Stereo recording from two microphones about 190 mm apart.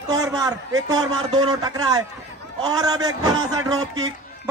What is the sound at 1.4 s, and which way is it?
A man's voice, 20° right (ahead or behind).